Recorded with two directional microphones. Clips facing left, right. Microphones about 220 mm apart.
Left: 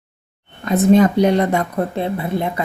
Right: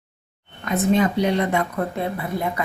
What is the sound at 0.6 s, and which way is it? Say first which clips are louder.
A woman's voice: left 6 dB; 40° left (ahead or behind).